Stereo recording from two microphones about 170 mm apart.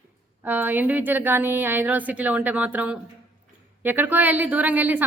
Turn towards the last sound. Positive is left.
turn(degrees=-10)  # may be behind; listen again after turning